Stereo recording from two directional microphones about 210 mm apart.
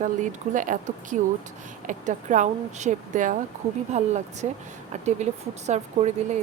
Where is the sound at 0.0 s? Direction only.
35° right (ahead or behind).